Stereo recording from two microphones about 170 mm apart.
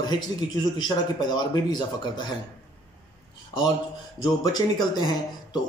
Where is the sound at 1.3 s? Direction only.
25° left (ahead or behind).